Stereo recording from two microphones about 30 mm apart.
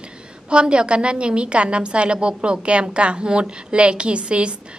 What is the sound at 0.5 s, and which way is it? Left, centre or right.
A woman's voice, right.